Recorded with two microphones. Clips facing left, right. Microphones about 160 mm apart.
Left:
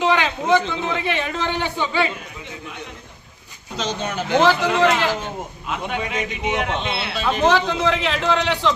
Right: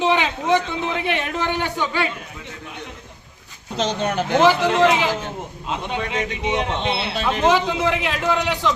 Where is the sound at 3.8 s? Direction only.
55° right (ahead or behind).